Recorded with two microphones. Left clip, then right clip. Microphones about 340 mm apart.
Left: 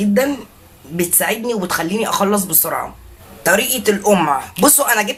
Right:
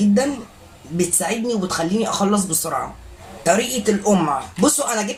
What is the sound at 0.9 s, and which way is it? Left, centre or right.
Speech, left.